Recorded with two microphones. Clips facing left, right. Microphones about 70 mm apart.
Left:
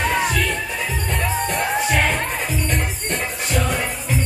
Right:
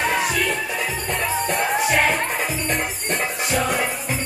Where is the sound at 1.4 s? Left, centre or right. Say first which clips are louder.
Right 1 dB; centre.